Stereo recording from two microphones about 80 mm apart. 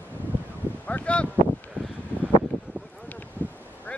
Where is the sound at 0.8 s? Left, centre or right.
Centre.